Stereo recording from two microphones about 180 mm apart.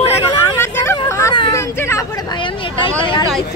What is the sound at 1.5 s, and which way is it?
Speech, 15° left (ahead or behind).